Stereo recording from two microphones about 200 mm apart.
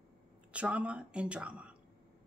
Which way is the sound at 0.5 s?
5° right (ahead or behind).